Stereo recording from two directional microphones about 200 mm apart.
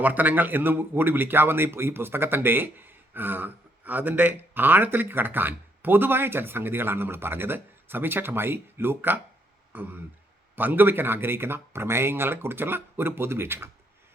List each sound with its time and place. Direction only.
0.0 s a man's voice: 10° right (ahead or behind)